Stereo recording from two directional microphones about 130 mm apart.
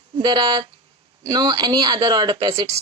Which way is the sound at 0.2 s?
35° right (ahead or behind).